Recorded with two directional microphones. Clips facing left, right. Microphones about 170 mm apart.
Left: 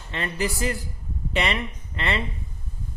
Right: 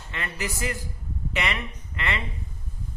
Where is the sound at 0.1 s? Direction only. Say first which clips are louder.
Left 5 dB; 30° left (ahead or behind).